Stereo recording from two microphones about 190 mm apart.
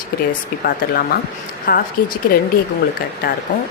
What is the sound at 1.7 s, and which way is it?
Speech, 45° left (ahead or behind).